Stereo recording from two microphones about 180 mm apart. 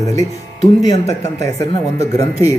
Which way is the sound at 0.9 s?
35° left (ahead or behind).